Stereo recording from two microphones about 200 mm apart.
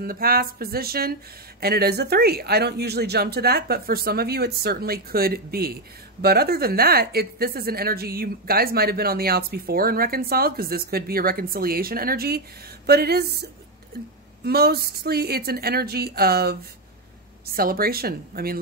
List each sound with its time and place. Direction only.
0.0 s a woman's voice: 45° right (ahead or behind)
17.6 s a woman's voice: 50° right (ahead or behind)